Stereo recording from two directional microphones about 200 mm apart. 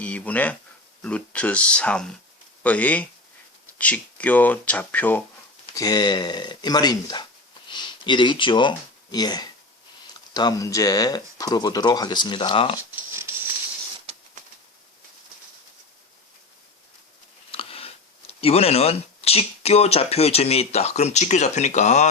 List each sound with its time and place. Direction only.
0.0 s speech: 5° left (ahead or behind)
5.7 s speech: 20° left (ahead or behind)
13.0 s pig: 10° right (ahead or behind)
14.1 s a sound: 30° right (ahead or behind)
17.5 s speech: 30° left (ahead or behind)